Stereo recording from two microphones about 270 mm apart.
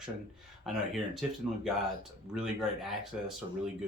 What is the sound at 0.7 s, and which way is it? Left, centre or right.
Speech, centre.